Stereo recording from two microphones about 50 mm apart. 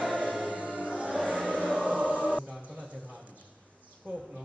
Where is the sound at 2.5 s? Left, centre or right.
Right.